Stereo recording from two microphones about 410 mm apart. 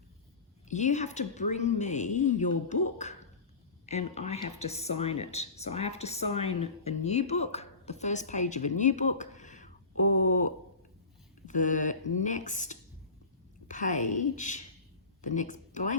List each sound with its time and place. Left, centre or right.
0.7 s speech: centre